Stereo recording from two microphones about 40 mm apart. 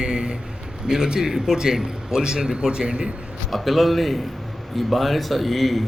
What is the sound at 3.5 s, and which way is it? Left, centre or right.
Speech, centre.